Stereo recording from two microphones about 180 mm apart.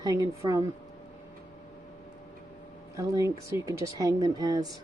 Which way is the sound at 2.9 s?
20° right (ahead or behind).